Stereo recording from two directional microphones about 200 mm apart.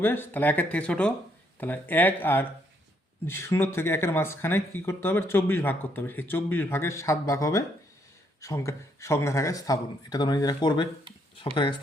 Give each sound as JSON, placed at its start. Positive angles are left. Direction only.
{"t": 0.0, "sound": "speech", "side_deg": 10}